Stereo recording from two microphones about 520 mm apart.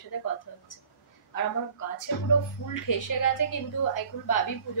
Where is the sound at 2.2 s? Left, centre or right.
Left.